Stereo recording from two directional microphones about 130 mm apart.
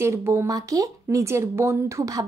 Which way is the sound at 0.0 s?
20° right (ahead or behind).